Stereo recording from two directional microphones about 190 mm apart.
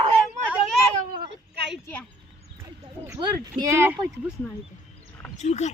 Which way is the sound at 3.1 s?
20° right (ahead or behind).